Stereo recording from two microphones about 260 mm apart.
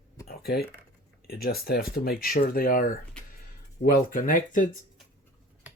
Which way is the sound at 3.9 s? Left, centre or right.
Left.